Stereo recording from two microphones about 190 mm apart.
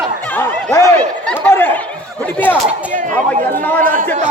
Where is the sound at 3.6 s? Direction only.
10° left (ahead or behind).